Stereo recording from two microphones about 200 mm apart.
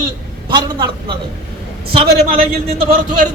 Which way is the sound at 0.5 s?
20° right (ahead or behind).